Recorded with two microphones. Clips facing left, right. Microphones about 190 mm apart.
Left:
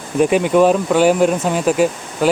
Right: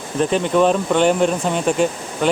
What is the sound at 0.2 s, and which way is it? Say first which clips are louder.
Speech: left 4 dB; 10° left (ahead or behind).